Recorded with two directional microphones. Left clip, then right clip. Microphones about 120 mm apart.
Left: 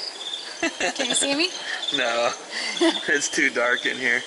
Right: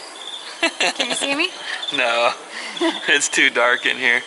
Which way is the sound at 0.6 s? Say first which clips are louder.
Right 6 dB; 10° right (ahead or behind).